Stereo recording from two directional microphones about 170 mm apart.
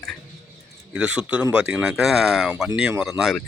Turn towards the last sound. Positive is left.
turn(degrees=-5)  # may be behind; listen again after turning